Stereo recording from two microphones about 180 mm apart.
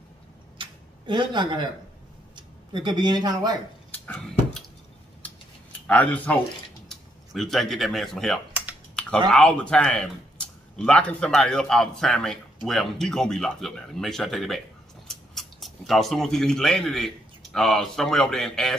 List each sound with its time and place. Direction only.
0.6 s tick-tock: 25° right (ahead or behind)
2.3 s speech: 25° right (ahead or behind)
3.9 s a sound: 10° left (ahead or behind)
5.9 s speech: 10° left (ahead or behind)
9.0 s typing: 5° left (ahead or behind)
9.3 s speech: 5° left (ahead or behind)